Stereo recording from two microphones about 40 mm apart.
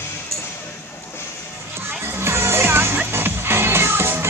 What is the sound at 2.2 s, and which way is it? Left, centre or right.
Music, right.